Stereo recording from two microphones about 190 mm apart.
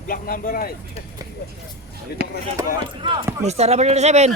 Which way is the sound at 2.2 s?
50° right (ahead or behind).